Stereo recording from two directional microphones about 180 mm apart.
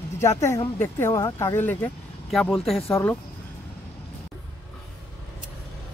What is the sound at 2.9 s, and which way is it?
Speech, 15° left (ahead or behind).